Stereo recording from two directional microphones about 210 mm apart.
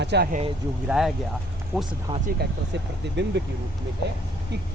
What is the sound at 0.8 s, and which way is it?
Speech, centre (ahead or behind).